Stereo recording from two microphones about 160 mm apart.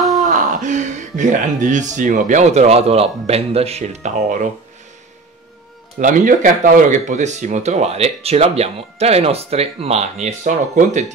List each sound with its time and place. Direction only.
0.3 s speech: 55° right (ahead or behind)
5.9 s speech: 55° right (ahead or behind)